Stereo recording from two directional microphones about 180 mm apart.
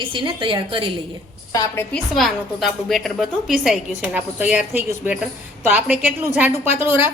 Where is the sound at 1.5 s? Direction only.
20° left (ahead or behind).